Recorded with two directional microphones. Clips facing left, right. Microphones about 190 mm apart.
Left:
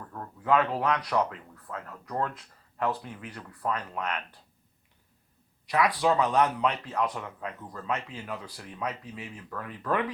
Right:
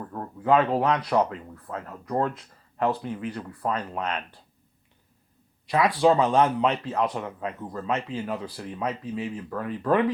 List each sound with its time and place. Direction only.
0.1 s a man's voice: 30° right (ahead or behind)
5.6 s a man's voice: 25° right (ahead or behind)